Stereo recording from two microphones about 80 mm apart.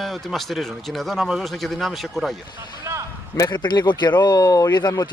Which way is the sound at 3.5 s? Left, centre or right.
Left.